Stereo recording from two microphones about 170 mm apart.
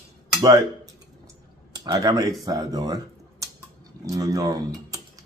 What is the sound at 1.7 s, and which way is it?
Speech, 20° right (ahead or behind).